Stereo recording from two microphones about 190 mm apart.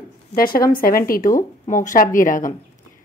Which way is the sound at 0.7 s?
50° left (ahead or behind).